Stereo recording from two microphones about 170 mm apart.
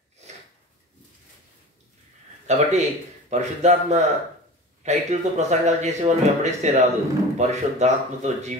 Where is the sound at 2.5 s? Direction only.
40° right (ahead or behind).